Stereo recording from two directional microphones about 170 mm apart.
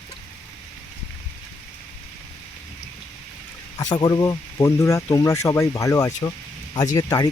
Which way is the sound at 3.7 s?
25° left (ahead or behind).